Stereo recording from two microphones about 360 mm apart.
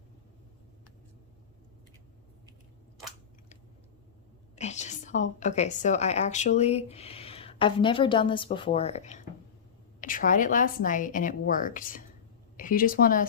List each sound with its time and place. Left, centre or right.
4.5 s a woman's voice: centre